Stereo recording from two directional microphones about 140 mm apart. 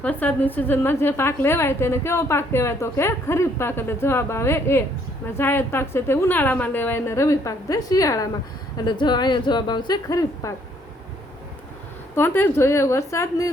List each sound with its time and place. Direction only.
0.0 s a woman's voice: 10° left (ahead or behind)
12.1 s a woman's voice: 15° left (ahead or behind)